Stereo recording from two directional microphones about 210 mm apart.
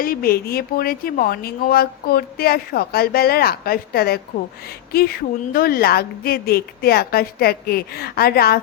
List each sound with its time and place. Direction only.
0.0 s speech: 45° left (ahead or behind)